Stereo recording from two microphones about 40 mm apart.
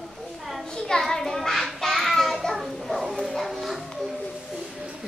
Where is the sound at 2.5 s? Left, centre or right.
Centre.